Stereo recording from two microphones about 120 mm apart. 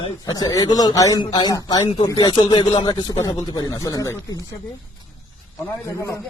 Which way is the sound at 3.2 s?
30° left (ahead or behind).